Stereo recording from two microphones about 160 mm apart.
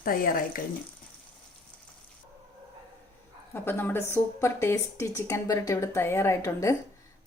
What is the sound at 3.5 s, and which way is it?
A woman's voice, 10° left (ahead or behind).